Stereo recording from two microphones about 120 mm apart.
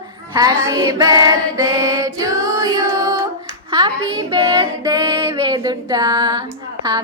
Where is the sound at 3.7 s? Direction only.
35° right (ahead or behind).